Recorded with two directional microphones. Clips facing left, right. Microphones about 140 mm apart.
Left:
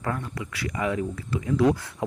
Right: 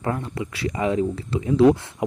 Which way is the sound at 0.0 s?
25° right (ahead or behind).